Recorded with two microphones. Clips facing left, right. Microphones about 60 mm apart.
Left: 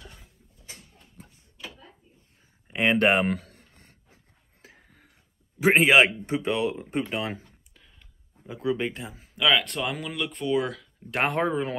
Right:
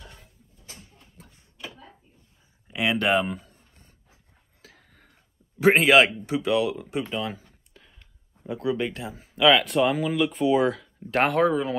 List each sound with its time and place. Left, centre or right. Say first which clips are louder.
2.7 s speech: left 1 dB; left
3.3 s a sound: left 5 dB; left
4.1 s a sound: left 1 dB; left
4.8 s a sound: even; centre
5.6 s speech: right 1 dB; centre
6.2 s speech: right 2 dB; left
7.2 s speech: right 1 dB; left
8.5 s speech: even; centre
9.0 s speech: right 9 dB; centre
11.2 s speech: right 3 dB; centre